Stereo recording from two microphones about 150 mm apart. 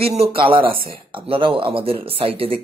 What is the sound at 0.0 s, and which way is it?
Speech, 40° right (ahead or behind).